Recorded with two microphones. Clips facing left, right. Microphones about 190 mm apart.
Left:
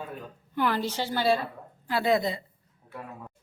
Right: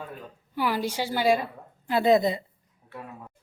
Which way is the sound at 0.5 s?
10° right (ahead or behind).